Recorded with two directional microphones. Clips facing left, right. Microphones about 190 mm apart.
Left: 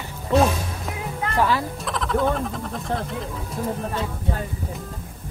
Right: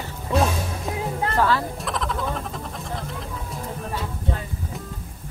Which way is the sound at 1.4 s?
15° left (ahead or behind).